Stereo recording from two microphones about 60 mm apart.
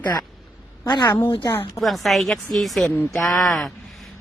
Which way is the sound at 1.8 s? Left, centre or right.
Centre.